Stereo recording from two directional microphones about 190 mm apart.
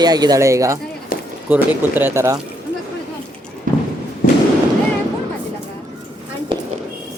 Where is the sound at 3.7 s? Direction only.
45° right (ahead or behind).